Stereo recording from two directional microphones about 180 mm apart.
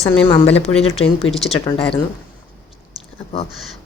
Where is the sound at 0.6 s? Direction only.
35° left (ahead or behind).